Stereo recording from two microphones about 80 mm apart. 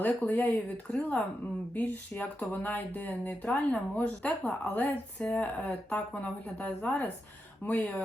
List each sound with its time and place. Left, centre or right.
0.0 s a woman's voice: left